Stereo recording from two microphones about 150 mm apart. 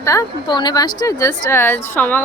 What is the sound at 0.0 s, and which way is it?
A woman's voice, 20° left (ahead or behind).